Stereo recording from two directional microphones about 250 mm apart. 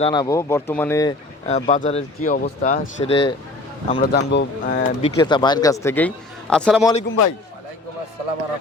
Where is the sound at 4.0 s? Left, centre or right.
Left.